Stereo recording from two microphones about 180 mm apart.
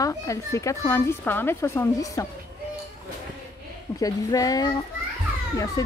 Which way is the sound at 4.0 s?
20° left (ahead or behind).